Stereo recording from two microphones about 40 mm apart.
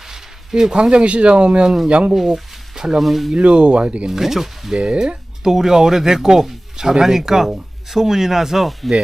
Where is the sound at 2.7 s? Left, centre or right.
Centre.